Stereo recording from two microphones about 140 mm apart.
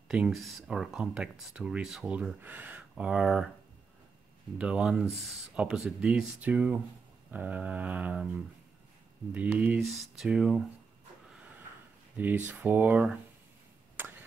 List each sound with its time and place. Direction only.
0.1 s speech: 5° right (ahead or behind)
4.6 s speech: 10° right (ahead or behind)
12.2 s speech: 10° right (ahead or behind)